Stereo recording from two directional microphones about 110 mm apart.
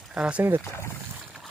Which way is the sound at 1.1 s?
10° right (ahead or behind).